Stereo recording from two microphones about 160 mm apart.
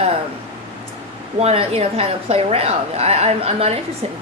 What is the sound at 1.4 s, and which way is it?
A woman's voice, 40° right (ahead or behind).